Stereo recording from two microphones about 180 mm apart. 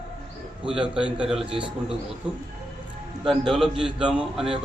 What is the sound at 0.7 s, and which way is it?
Speech, 5° right (ahead or behind).